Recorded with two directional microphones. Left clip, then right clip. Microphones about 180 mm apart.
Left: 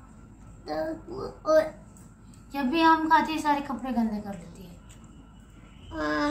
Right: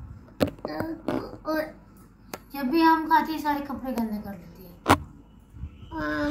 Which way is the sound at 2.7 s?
30° left (ahead or behind).